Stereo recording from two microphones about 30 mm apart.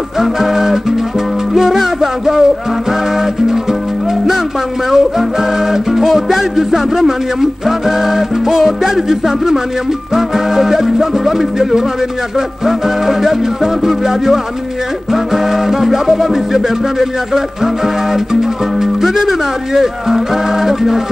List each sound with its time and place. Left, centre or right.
0.2 s music: centre
4.9 s music: centre
7.6 s speech: centre
15.1 s music: centre
17.8 s speech: centre